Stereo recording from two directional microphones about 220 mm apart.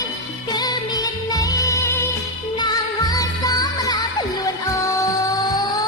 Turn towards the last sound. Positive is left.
turn(degrees=15)  # may be behind; listen again after turning